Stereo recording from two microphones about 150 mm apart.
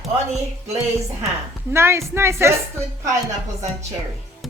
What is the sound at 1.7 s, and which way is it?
Speech, 20° right (ahead or behind).